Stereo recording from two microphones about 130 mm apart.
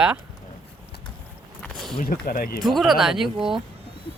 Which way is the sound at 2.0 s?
90° left.